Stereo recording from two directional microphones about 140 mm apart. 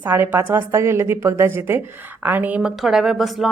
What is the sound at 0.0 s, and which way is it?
Speech, 15° right (ahead or behind).